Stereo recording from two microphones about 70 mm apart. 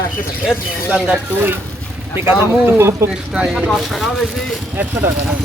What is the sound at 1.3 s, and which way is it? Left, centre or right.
Speech, right.